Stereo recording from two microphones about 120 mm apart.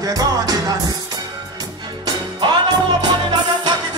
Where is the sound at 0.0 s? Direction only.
30° right (ahead or behind).